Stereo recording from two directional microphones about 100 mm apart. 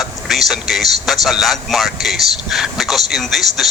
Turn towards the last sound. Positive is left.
turn(degrees=0)  # may be behind; listen again after turning